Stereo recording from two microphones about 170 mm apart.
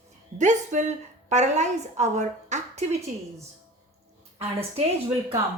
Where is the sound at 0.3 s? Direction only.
45° right (ahead or behind).